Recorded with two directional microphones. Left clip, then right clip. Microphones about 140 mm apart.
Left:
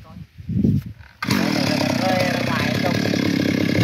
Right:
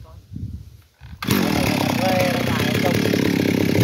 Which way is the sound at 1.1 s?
30° right (ahead or behind).